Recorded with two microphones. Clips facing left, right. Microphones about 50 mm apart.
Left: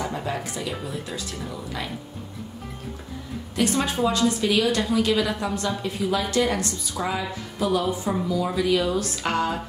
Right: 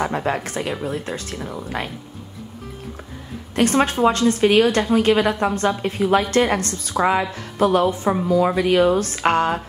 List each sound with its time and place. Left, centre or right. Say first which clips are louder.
0.0 s a woman's voice: right 6 dB; right
3.5 s a woman's voice: right 6 dB; right